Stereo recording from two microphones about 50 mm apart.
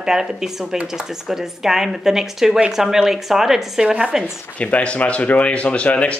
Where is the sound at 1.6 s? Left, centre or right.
Centre.